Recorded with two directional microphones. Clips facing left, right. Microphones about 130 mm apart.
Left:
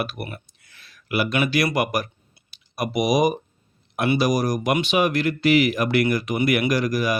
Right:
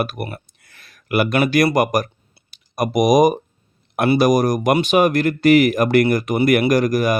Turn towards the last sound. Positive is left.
turn(degrees=-50)  # may be behind; listen again after turning